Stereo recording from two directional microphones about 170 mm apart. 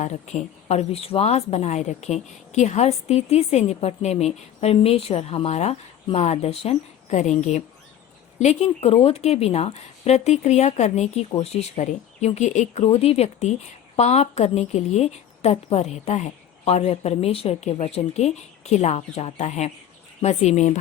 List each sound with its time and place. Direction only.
0.0 s speech: 45° left (ahead or behind)